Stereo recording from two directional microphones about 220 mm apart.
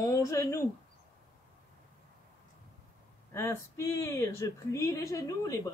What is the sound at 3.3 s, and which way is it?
Speech, 10° left (ahead or behind).